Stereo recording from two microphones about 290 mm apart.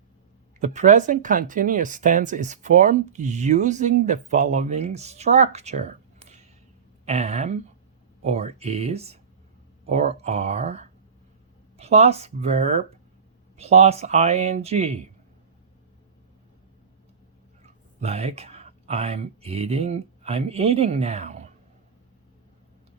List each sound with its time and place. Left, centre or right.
0.6 s speech: right
17.6 s speech: right